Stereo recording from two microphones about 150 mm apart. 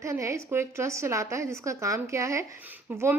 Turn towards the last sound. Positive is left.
turn(degrees=-15)  # may be behind; listen again after turning